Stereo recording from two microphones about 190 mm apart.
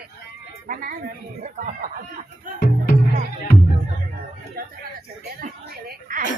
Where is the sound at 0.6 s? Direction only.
45° right (ahead or behind).